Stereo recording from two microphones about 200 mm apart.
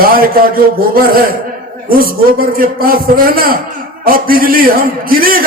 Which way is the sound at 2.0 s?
45° right (ahead or behind).